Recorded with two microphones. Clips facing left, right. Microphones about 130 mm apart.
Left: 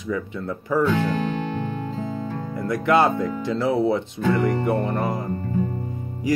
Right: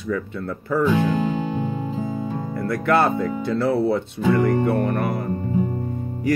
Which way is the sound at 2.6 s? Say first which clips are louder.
Left 1 dB; 20° left (ahead or behind).